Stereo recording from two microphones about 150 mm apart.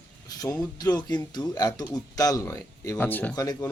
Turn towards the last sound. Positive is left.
turn(degrees=25)  # may be behind; listen again after turning